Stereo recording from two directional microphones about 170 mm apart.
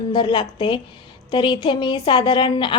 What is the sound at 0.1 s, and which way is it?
A woman's voice, 30° left (ahead or behind).